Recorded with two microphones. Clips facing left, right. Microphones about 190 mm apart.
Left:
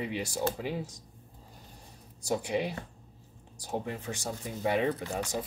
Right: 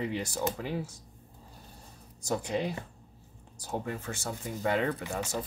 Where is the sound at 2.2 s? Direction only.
15° left (ahead or behind).